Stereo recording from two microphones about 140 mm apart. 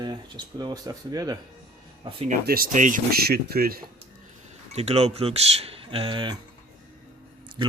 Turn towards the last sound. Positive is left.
turn(degrees=-30)  # may be behind; listen again after turning